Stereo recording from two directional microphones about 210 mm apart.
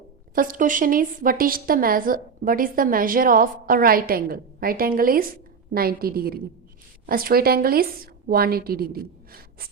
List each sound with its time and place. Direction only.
0.3 s a woman's voice: 40° right (ahead or behind)